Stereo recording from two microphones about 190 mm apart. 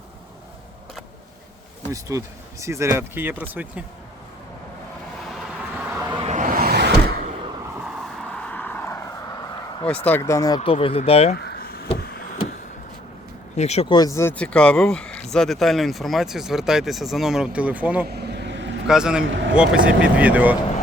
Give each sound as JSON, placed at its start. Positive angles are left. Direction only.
{"t": 1.9, "sound": "speech", "side_deg": -15}
{"t": 5.2, "sound": "vehicle", "side_deg": 0}
{"t": 6.1, "sound": "vehicle", "side_deg": -35}
{"t": 8.0, "sound": "vehicle", "side_deg": 5}
{"t": 10.1, "sound": "speech", "side_deg": 15}
{"t": 10.6, "sound": "speech", "side_deg": 30}
{"t": 11.3, "sound": "vehicle", "side_deg": 55}
{"t": 13.6, "sound": "speech", "side_deg": 35}
{"t": 13.8, "sound": "speech", "side_deg": 20}
{"t": 18.1, "sound": "vehicle", "side_deg": -60}
{"t": 18.9, "sound": "speech", "side_deg": -5}
{"t": 19.2, "sound": "speech", "side_deg": -75}
{"t": 19.5, "sound": "speech", "side_deg": -5}